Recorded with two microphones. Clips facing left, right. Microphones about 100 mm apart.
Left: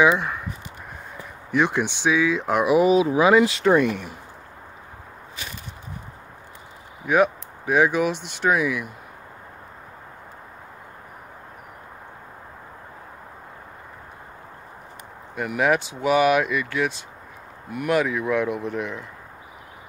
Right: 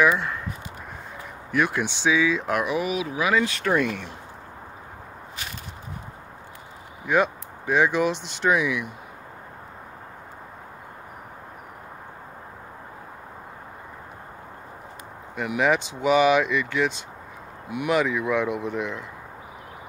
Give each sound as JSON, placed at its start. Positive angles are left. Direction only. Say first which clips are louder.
{"t": 0.0, "sound": "speech", "louder": "left 2 dB", "side_deg": 15}
{"t": 1.5, "sound": "speech", "louder": "left 2 dB", "side_deg": 15}
{"t": 2.7, "sound": "speech", "louder": "left 9 dB", "side_deg": 25}
{"t": 7.1, "sound": "speech", "louder": "left 3 dB", "side_deg": 10}
{"t": 15.3, "sound": "speech", "louder": "left 1 dB", "side_deg": 0}